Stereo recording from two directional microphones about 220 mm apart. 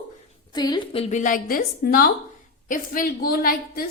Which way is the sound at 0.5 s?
20° left (ahead or behind).